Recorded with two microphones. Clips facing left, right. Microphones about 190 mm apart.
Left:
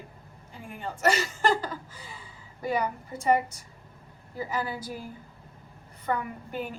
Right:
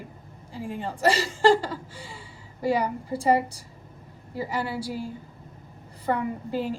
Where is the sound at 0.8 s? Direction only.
30° right (ahead or behind).